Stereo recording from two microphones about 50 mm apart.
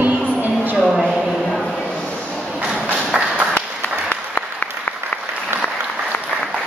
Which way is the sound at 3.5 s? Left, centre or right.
Left.